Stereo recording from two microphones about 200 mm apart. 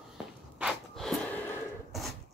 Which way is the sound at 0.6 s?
Centre (ahead or behind).